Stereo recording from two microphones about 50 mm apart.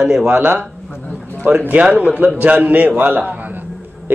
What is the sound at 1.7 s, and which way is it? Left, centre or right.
A man's voice, right.